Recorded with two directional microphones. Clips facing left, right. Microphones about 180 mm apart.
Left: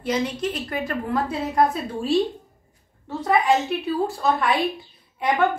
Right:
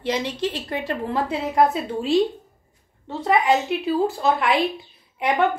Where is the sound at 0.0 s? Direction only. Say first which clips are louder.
Even; 25° right (ahead or behind).